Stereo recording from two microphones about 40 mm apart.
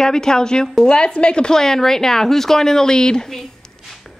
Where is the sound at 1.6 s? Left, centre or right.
Centre.